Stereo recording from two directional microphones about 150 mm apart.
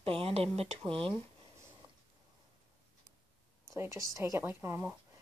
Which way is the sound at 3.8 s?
20° right (ahead or behind).